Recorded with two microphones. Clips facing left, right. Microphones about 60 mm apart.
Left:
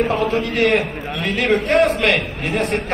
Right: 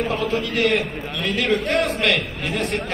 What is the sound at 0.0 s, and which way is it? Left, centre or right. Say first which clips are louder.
A man's voice: left 4 dB; left.